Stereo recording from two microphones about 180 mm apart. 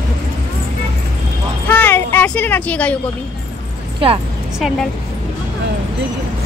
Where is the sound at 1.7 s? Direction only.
10° left (ahead or behind).